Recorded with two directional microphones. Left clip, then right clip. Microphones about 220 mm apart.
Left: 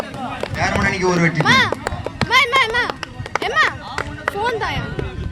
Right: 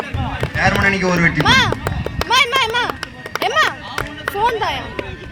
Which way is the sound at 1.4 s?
35° right (ahead or behind).